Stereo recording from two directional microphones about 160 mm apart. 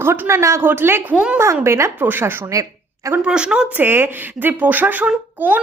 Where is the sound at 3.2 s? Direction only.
5° right (ahead or behind).